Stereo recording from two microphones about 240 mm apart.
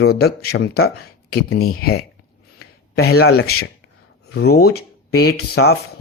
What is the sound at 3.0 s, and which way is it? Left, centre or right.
Speech, left.